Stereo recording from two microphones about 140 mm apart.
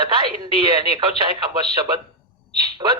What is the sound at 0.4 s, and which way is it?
Speech, 35° right (ahead or behind).